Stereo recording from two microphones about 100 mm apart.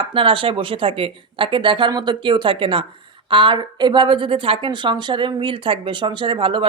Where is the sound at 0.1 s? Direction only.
60° right (ahead or behind).